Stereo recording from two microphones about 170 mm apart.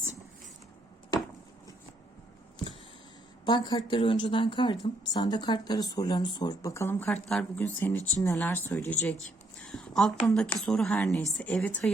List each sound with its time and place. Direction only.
3.4 s speech: 25° left (ahead or behind); by 9.1 s 10° left (ahead or behind)
9.6 s a sound: 5° left (ahead or behind)
10.3 s speech: 5° left (ahead or behind)